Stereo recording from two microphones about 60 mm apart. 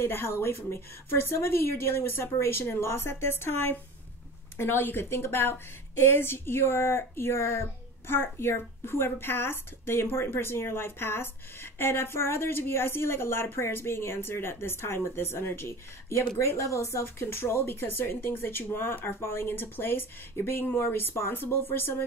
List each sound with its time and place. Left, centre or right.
0.0 s speech: left